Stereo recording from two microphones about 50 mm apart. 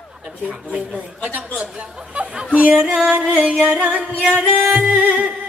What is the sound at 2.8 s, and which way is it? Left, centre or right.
Music, centre.